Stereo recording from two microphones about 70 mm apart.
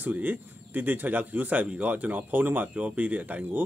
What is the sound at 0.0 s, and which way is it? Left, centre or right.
Speech, right.